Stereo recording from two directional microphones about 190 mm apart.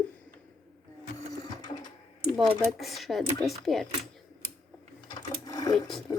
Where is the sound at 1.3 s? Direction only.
20° left (ahead or behind).